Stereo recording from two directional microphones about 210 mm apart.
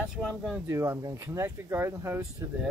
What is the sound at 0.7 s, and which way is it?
Speech, 15° right (ahead or behind).